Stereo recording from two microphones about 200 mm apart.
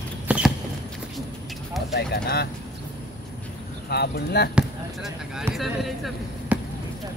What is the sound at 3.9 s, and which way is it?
Speech, 55° left (ahead or behind).